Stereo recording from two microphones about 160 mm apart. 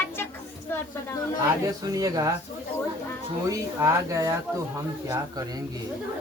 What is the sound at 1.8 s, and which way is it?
Speech, 25° right (ahead or behind).